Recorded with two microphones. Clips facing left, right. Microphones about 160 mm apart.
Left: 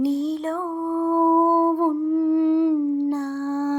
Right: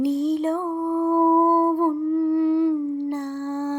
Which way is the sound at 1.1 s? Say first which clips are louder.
Even; centre (ahead or behind).